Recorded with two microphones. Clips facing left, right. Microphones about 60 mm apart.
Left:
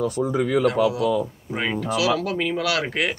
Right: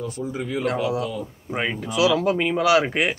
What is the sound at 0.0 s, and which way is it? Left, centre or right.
Speech, left.